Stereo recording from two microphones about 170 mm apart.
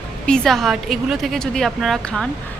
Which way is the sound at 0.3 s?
5° left (ahead or behind).